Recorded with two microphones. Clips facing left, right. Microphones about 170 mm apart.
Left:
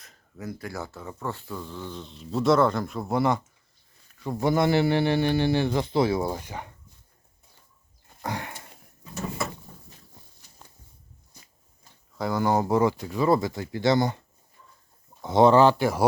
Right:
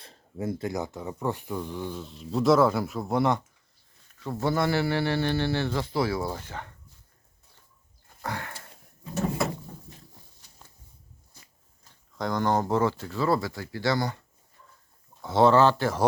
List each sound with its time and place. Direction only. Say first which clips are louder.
0.0 s speech: right 5 dB; 30° right (ahead or behind); by 3.4 s centre (ahead or behind)
4.2 s speech: left 3 dB; 15° left (ahead or behind)
8.2 s a sound: left 2 dB; 15° left (ahead or behind)
12.1 s speech: left 2 dB; 5° left (ahead or behind); by 14.2 s 20° left (ahead or behind)
15.2 s speech: left 2 dB; 15° left (ahead or behind)